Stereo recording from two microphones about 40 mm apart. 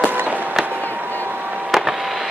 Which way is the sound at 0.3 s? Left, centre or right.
Right.